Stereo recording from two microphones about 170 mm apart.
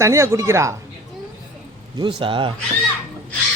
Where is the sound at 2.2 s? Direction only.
30° right (ahead or behind).